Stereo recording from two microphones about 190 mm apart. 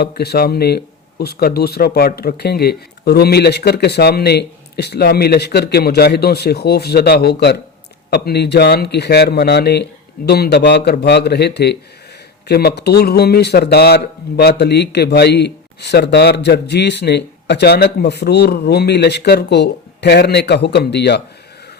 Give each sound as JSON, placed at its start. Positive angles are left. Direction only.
{"t": 0.0, "sound": "speech", "side_deg": 60}